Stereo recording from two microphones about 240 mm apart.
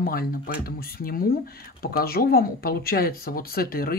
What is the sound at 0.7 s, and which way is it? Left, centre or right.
Speech, left.